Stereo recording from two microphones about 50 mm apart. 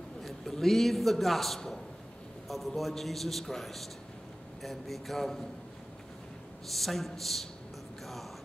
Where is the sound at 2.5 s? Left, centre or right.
Centre.